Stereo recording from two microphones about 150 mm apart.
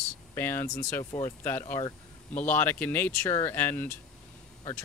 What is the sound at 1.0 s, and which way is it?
Speech, 25° left (ahead or behind).